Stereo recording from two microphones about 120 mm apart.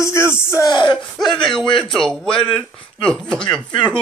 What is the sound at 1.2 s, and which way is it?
Speech, 5° left (ahead or behind).